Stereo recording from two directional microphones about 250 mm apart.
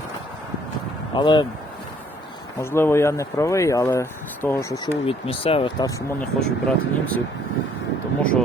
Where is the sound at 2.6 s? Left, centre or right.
Centre.